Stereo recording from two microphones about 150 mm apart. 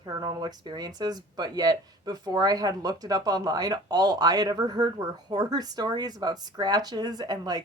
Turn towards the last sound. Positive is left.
turn(degrees=-25)  # may be behind; listen again after turning